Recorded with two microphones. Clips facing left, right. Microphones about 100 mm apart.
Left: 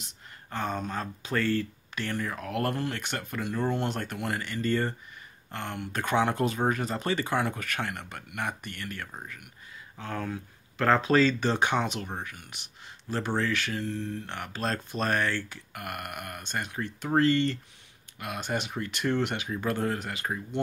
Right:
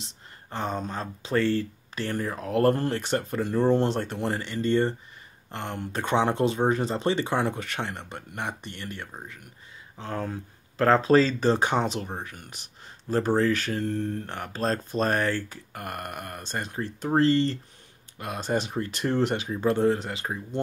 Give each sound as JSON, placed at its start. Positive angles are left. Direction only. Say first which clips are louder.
{"t": 0.0, "sound": "speech", "louder": "right 2 dB", "side_deg": -25}